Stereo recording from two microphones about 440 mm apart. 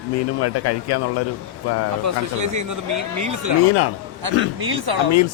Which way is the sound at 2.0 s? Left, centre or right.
Right.